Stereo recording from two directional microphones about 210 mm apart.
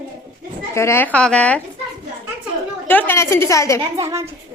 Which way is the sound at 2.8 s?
10° left (ahead or behind).